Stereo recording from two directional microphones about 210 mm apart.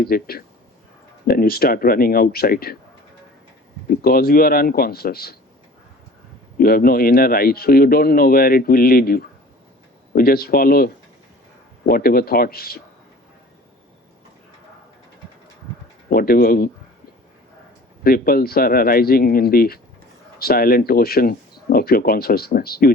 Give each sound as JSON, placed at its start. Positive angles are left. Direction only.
{"t": 0.0, "sound": "speech", "side_deg": 45}
{"t": 4.0, "sound": "speech", "side_deg": 45}
{"t": 6.6, "sound": "speech", "side_deg": 45}
{"t": 16.0, "sound": "speech", "side_deg": 45}
{"t": 18.0, "sound": "speech", "side_deg": 45}